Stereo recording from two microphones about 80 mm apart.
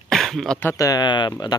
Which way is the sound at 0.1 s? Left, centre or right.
Centre.